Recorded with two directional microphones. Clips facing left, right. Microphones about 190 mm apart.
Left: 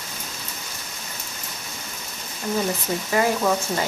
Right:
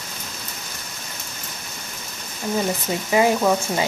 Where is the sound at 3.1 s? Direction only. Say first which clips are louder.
Right 3 dB; 15° right (ahead or behind).